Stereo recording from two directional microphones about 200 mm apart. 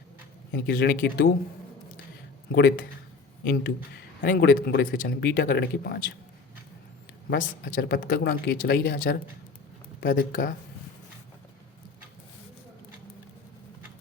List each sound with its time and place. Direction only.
0.5 s a man's voice: 50° left (ahead or behind)
2.5 s a man's voice: 55° left (ahead or behind)
7.3 s a man's voice: 45° left (ahead or behind)